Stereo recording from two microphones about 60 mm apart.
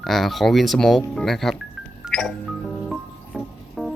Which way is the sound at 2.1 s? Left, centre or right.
Centre.